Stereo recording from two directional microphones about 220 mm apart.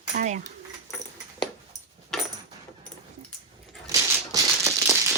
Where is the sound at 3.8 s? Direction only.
15° right (ahead or behind).